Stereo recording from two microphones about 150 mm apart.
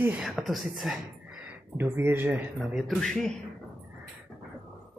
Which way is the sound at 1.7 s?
15° right (ahead or behind).